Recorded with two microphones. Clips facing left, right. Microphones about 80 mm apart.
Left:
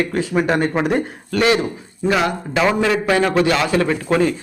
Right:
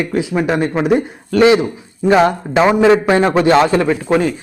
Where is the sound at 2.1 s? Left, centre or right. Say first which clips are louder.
Right 7 dB; right.